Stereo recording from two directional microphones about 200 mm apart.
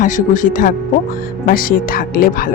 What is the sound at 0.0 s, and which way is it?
Speech, 40° left (ahead or behind).